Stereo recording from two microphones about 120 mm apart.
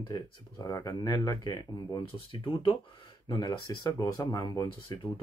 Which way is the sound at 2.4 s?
50° left (ahead or behind).